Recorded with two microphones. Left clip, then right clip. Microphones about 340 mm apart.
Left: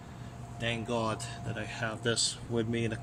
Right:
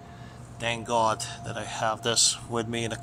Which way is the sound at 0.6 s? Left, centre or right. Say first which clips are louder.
Right 8 dB; centre.